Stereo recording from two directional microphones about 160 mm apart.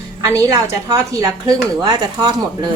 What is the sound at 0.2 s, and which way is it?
A woman's voice, 20° right (ahead or behind).